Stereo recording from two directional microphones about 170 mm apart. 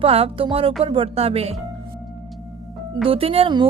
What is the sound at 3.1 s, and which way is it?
Speech, 35° right (ahead or behind).